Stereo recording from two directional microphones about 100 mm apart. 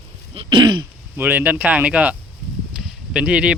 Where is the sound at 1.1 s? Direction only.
20° right (ahead or behind).